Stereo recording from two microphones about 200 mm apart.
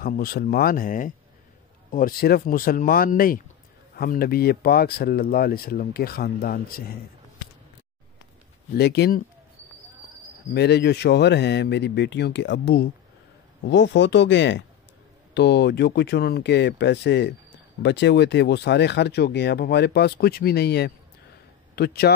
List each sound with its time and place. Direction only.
0.0 s speech: 50° left (ahead or behind)
8.7 s speech: 55° left (ahead or behind)
10.5 s speech: 55° left (ahead or behind)